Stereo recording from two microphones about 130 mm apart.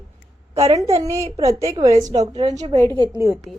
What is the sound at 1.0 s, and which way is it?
Speech, 25° right (ahead or behind).